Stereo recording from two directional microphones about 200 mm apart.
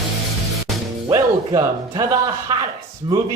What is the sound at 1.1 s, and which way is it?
Music, 20° right (ahead or behind).